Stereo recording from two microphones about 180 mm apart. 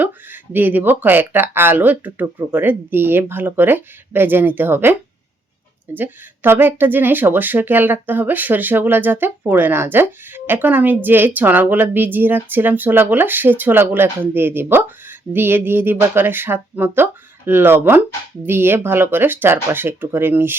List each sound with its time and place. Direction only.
0.5 s speech: 10° right (ahead or behind)